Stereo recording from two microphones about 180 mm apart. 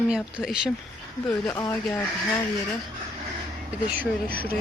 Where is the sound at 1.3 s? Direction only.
15° left (ahead or behind).